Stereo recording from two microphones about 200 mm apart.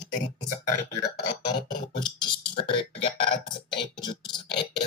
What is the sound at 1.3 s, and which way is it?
Speech, 20° left (ahead or behind).